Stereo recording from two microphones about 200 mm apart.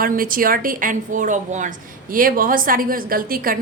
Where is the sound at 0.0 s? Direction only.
45° right (ahead or behind).